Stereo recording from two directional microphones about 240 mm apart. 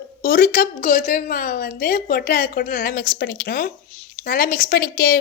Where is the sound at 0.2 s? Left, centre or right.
Left.